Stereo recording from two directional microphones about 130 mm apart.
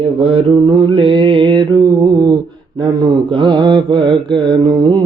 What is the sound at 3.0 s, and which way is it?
Mantra, 35° right (ahead or behind).